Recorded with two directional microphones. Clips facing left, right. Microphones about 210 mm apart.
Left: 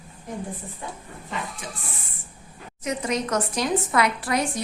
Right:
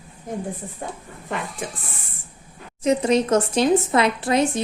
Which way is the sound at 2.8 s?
30° right (ahead or behind).